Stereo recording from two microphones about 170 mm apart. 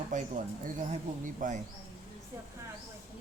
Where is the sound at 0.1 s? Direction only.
45° right (ahead or behind).